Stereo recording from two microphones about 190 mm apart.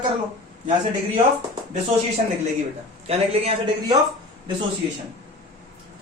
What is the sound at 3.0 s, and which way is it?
Speech, 30° right (ahead or behind).